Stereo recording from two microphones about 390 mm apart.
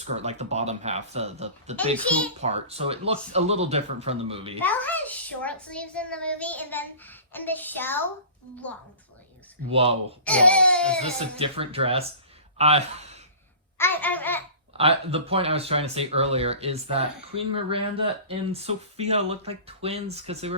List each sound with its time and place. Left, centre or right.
0.0 s speech: centre
4.6 s a child's voice: centre
9.6 s speech: centre
10.2 s a child's voice: centre
11.3 s speech: centre
13.7 s a child's voice: centre
14.8 s speech: centre